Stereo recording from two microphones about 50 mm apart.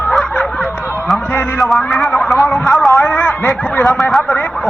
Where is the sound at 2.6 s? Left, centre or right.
Centre.